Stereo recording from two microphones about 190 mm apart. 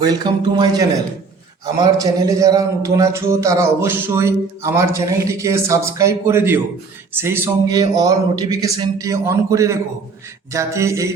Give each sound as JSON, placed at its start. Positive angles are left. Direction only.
{"t": 0.0, "sound": "a man's voice", "side_deg": -20}